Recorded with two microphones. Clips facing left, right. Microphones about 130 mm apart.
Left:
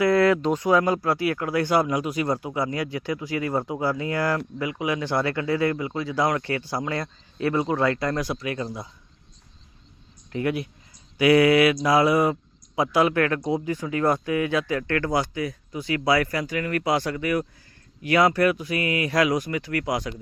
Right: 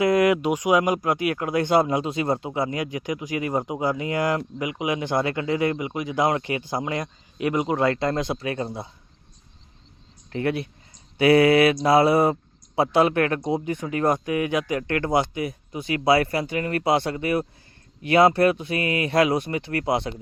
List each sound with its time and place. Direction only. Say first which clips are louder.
0.0 s speech: even; 15° right (ahead or behind)
10.3 s speech: right 1 dB; 30° right (ahead or behind)